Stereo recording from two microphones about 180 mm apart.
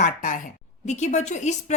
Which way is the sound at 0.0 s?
50° left (ahead or behind).